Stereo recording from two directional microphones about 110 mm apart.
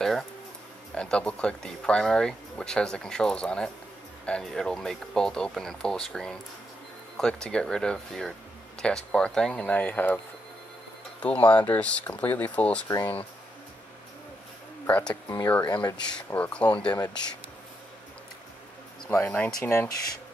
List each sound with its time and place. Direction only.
0.9 s speech: 10° left (ahead or behind)
12.8 s speech: 35° left (ahead or behind)
14.9 s speech: 15° left (ahead or behind)
19.0 s speech: 15° left (ahead or behind)